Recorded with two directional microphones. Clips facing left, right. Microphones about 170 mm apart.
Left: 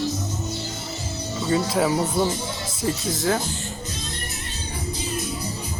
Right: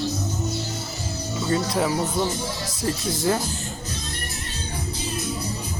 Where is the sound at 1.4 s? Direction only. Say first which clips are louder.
Left 2 dB; 5° left (ahead or behind).